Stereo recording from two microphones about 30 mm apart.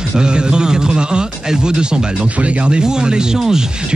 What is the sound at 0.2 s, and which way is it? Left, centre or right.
A man's voice, right.